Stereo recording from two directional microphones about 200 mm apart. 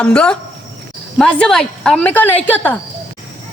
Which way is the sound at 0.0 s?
5° left (ahead or behind).